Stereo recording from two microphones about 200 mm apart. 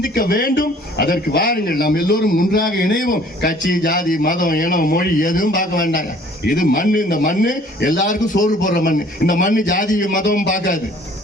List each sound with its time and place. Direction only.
0.1 s a man's voice: 50° left (ahead or behind)